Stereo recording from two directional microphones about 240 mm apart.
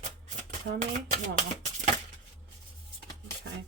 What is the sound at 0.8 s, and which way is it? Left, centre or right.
Speech, right.